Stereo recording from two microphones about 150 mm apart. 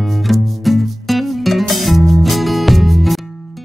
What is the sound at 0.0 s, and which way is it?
Music, centre (ahead or behind).